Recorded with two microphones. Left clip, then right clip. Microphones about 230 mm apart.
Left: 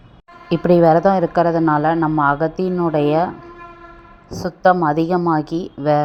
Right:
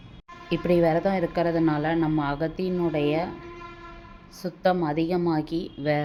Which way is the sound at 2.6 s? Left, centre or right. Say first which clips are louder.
Left 8 dB; centre.